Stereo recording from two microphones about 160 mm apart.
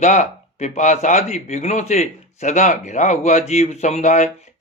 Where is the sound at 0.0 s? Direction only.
50° left (ahead or behind).